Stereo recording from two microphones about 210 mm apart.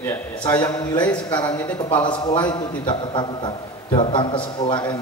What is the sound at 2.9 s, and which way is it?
A man's voice, 20° left (ahead or behind).